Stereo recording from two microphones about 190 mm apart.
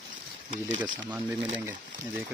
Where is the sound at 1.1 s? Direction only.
10° right (ahead or behind).